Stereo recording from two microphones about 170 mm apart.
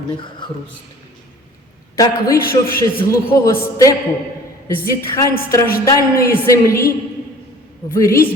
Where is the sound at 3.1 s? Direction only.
20° left (ahead or behind).